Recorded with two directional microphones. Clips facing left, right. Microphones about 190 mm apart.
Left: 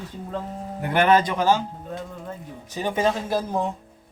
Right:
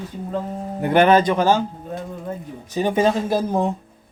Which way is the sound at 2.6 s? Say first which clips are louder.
Right 5 dB; 20° right (ahead or behind).